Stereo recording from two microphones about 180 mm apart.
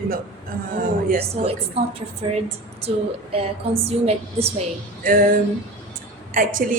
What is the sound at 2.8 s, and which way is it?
A woman's voice, 30° right (ahead or behind).